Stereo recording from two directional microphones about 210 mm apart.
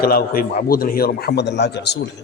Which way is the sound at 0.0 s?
45° left (ahead or behind).